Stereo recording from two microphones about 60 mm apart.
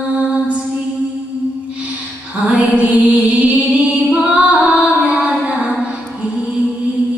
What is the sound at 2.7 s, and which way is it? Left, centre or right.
Music, right.